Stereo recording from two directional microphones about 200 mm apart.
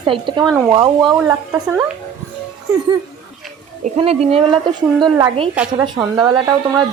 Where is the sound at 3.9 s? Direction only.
30° right (ahead or behind).